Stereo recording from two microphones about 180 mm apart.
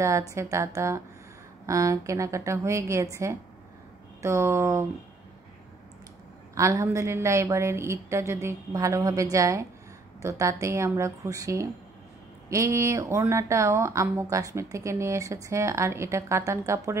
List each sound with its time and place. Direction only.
0.0 s speech: 15° right (ahead or behind)
6.5 s speech: 15° right (ahead or behind)